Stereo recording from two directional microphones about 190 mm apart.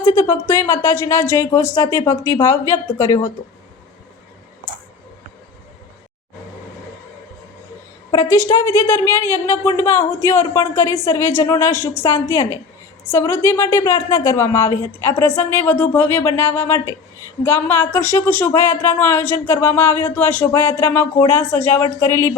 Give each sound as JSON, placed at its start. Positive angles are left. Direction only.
{"t": 0.0, "sound": "speech", "side_deg": 15}
{"t": 8.1, "sound": "speech", "side_deg": 15}